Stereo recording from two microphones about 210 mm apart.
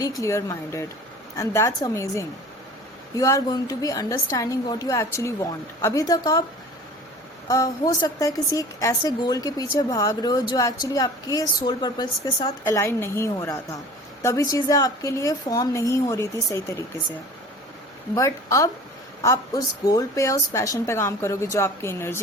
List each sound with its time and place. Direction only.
0.2 s a woman's voice: 15° left (ahead or behind)
7.4 s a woman's voice: 15° left (ahead or behind)
18.1 s a woman's voice: 15° left (ahead or behind)